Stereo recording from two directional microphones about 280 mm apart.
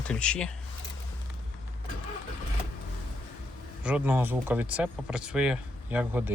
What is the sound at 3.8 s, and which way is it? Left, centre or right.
Speech, centre.